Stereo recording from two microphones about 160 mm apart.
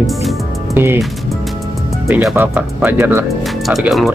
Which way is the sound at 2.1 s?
Centre (ahead or behind).